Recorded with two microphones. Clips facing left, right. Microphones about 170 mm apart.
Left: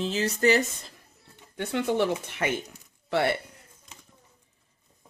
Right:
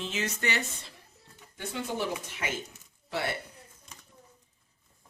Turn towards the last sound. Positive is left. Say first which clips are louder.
# left 8 dB
turn(degrees=65)  # may be behind; listen again after turning